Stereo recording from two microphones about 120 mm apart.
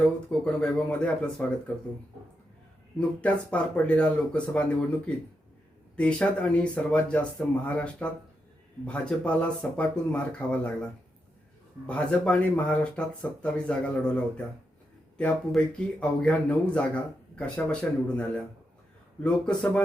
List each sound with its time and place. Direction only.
0.3 s speech: 10° left (ahead or behind)
3.0 s speech: 10° left (ahead or behind)
11.9 s speech: 10° left (ahead or behind)
19.2 s speech: 10° left (ahead or behind)